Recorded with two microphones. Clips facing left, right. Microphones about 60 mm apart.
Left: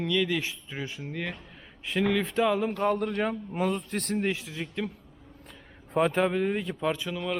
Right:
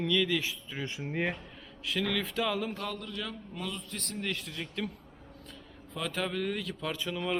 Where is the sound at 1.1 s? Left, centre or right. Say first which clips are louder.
Right 4 dB; centre.